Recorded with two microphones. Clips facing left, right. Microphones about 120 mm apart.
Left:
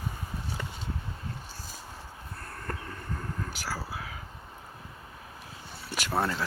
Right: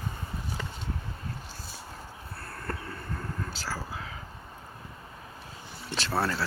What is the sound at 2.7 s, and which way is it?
Vehicle, 15° left (ahead or behind).